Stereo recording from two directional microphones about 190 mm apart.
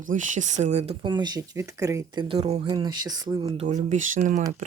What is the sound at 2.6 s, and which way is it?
Speech, 20° right (ahead or behind).